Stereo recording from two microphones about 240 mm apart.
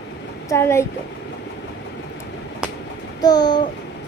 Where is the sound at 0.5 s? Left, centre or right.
Centre.